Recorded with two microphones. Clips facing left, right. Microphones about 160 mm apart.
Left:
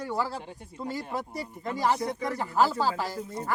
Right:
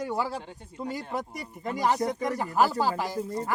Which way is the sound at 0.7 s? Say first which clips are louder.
Right 1 dB; 15° right (ahead or behind).